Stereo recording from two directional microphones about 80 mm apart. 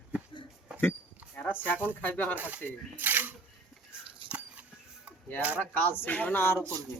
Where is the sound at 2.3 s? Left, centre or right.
Centre.